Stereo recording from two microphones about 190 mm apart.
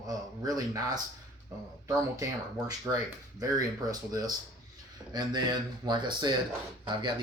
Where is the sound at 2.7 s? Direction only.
20° right (ahead or behind).